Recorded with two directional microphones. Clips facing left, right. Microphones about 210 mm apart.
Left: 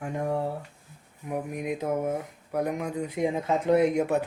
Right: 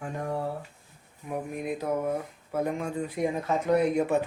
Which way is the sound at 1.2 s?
15° left (ahead or behind).